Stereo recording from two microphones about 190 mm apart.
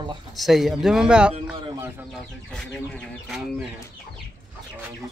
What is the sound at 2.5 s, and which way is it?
Speech, centre (ahead or behind).